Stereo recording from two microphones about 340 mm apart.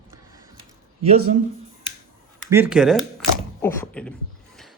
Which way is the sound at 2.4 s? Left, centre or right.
Centre.